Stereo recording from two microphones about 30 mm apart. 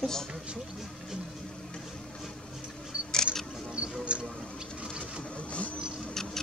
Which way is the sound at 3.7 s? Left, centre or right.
Right.